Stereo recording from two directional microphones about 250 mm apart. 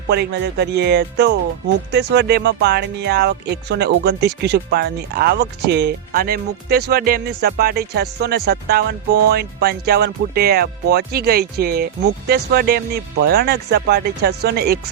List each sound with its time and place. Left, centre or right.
0.1 s speech: right